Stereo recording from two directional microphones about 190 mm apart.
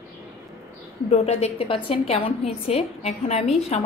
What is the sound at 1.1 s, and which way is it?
A woman's voice, 35° left (ahead or behind).